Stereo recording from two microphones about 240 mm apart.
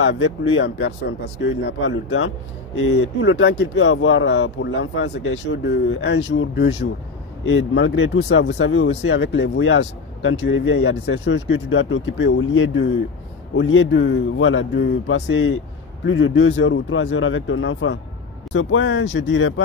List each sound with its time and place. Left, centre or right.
0.0 s speech: left